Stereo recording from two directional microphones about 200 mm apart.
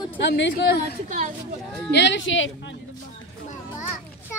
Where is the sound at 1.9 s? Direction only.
60° left (ahead or behind).